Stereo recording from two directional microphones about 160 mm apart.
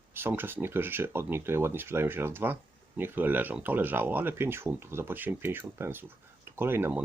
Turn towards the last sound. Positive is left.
turn(degrees=-10)  # may be behind; listen again after turning